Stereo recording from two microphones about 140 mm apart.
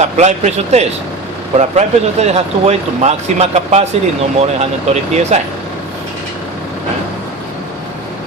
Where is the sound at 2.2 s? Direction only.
50° right (ahead or behind).